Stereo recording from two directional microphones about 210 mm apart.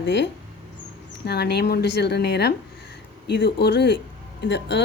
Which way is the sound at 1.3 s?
50° left (ahead or behind).